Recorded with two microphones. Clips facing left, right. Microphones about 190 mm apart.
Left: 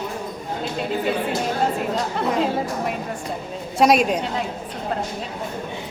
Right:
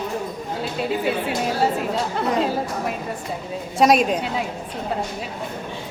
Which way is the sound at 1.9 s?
Centre (ahead or behind).